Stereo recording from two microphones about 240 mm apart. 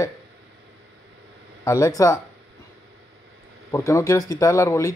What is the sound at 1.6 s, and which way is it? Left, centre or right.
Speech, centre.